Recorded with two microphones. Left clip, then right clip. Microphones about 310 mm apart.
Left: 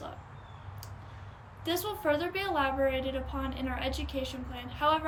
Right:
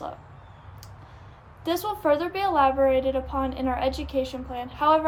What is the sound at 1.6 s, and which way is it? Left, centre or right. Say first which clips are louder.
A woman's voice: right 6 dB; centre.